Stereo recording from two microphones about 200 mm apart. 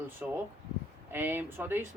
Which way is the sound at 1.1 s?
10° right (ahead or behind).